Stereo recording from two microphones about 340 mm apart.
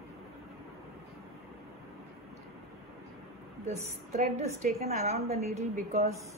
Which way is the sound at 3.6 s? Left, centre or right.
Centre.